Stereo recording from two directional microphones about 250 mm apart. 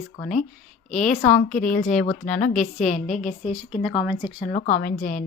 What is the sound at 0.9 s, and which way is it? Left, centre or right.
Speech, left.